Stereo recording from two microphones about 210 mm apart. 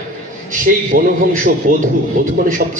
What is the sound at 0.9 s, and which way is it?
Speech, 45° right (ahead or behind).